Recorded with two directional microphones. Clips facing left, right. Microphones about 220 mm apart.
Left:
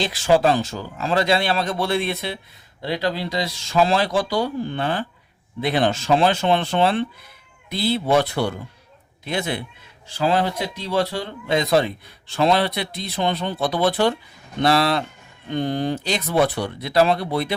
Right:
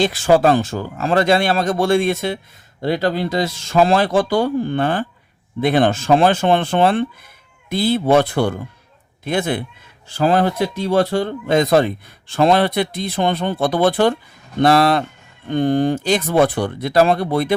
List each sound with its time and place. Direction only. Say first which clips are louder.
0.0 s speech: right 4 dB; 55° right (ahead or behind)